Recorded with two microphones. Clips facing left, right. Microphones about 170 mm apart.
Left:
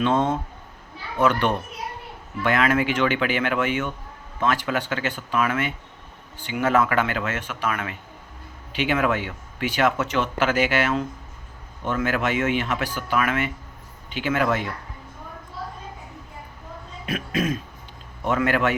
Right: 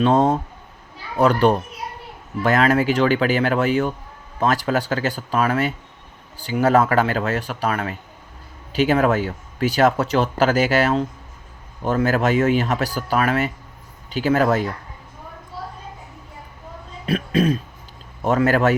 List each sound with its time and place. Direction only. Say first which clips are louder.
0.0 s speech: right 5 dB; 35° right (ahead or behind)
17.1 s speech: right 6 dB; 35° right (ahead or behind)